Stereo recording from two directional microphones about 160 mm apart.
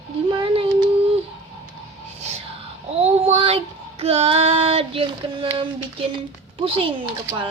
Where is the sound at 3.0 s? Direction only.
40° right (ahead or behind).